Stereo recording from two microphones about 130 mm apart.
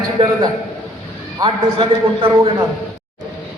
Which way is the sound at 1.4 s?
40° right (ahead or behind).